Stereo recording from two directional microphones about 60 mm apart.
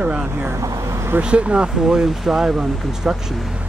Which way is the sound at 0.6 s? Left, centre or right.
Right.